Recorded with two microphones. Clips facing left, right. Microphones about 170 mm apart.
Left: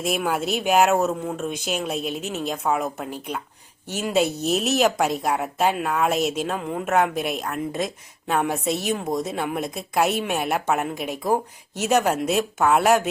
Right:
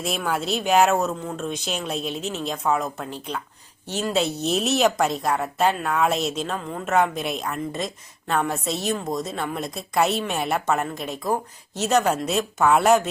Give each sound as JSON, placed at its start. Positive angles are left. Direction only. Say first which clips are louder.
{"t": 0.0, "sound": "a woman's voice", "louder": "left 2 dB", "side_deg": 10}